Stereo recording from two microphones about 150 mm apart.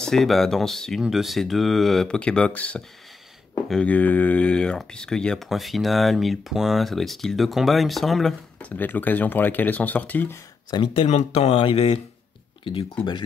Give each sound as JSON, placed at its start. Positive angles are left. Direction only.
{"t": 0.0, "sound": "speech", "side_deg": 0}
{"t": 11.1, "sound": "speech", "side_deg": 50}